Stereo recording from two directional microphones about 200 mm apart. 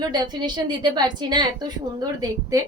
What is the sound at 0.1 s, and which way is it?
A woman's voice, 20° right (ahead or behind).